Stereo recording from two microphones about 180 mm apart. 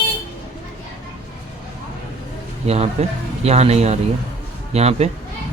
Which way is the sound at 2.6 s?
35° right (ahead or behind).